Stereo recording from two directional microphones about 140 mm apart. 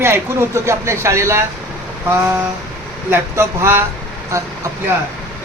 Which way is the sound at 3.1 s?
20° right (ahead or behind).